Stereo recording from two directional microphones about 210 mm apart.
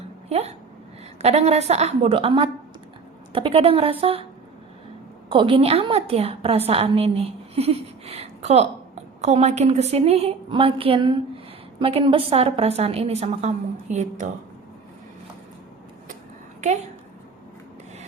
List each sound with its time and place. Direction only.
0.3 s a sound: 30° right (ahead or behind)
1.2 s a woman's voice: 30° right (ahead or behind)
5.3 s a woman's voice: 25° right (ahead or behind)
16.6 s a woman's voice: 35° right (ahead or behind)